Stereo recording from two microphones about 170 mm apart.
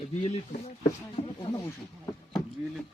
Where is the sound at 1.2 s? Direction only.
35° left (ahead or behind).